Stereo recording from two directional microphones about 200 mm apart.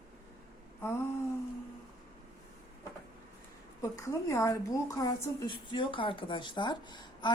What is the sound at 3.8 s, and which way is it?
A woman's voice, 15° left (ahead or behind).